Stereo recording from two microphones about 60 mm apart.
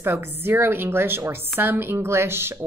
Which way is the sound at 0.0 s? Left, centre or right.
Right.